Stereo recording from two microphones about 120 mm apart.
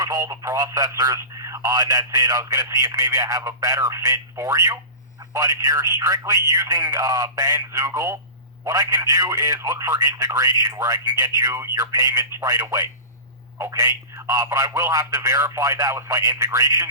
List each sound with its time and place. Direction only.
0.0 s speech: 30° right (ahead or behind)